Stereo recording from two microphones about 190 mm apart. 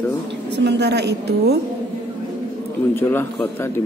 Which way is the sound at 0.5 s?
65° right (ahead or behind).